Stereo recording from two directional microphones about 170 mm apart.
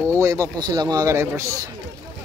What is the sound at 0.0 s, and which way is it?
Speech, 15° right (ahead or behind).